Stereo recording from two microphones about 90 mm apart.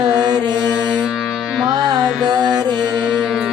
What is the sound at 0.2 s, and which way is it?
Mantra, 50° right (ahead or behind).